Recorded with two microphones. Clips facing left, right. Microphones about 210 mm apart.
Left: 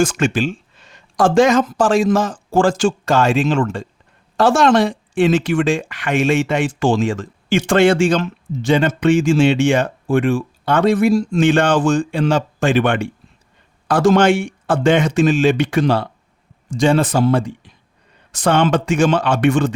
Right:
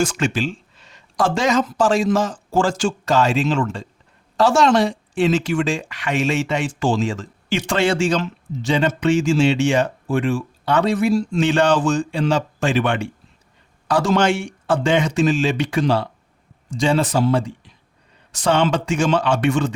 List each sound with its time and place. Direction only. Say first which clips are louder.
0.0 s speech: left 4 dB; 50° left (ahead or behind)